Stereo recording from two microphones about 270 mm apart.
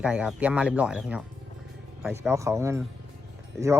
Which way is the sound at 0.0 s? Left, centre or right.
Centre.